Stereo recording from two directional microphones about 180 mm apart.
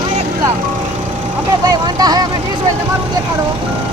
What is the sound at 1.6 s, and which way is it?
Speech, 20° right (ahead or behind).